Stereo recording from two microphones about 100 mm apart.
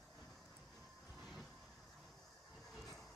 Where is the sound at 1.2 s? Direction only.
5° right (ahead or behind).